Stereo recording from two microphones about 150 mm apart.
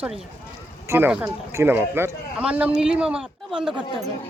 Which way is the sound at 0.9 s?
10° right (ahead or behind).